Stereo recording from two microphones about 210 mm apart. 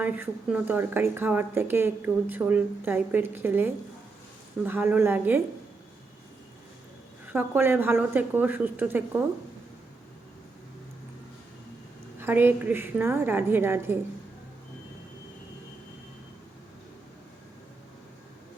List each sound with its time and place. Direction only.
0.0 s a woman's voice: 5° right (ahead or behind)
7.3 s a woman's voice: 10° right (ahead or behind)
12.2 s a woman's voice: 10° right (ahead or behind)